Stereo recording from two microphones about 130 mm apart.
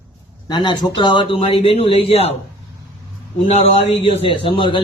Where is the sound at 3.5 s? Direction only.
55° left (ahead or behind).